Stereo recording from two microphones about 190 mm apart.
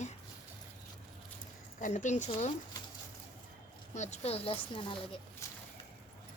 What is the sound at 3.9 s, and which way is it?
Speech, 35° left (ahead or behind).